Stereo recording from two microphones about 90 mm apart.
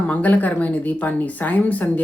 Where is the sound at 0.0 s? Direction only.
15° left (ahead or behind).